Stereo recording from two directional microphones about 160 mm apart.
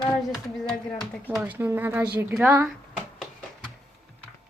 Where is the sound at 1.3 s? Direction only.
10° right (ahead or behind).